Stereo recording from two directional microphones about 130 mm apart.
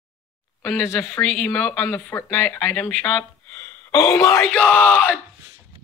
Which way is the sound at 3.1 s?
5° left (ahead or behind).